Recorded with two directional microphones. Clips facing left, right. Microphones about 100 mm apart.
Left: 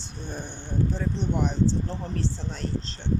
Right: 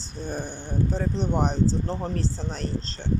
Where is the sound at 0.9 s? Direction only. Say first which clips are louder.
Right 2 dB; 40° right (ahead or behind).